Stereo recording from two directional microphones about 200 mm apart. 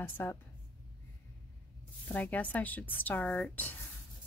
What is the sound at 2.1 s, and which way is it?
Speech, 10° left (ahead or behind).